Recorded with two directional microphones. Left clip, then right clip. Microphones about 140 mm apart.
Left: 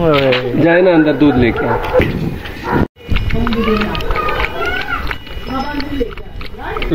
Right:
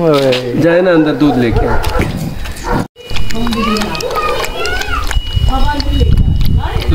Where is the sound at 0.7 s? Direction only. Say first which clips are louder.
Right 1 dB; 40° right (ahead or behind).